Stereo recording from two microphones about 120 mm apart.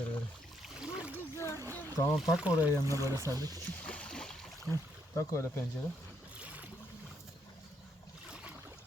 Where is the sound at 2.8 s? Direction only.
25° right (ahead or behind).